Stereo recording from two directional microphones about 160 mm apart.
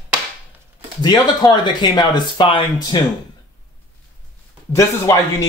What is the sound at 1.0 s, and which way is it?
Speech, 25° left (ahead or behind).